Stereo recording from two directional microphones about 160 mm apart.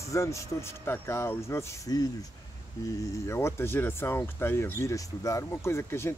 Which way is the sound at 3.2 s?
15° left (ahead or behind).